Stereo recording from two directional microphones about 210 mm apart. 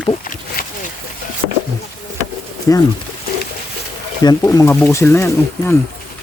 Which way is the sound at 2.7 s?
15° left (ahead or behind).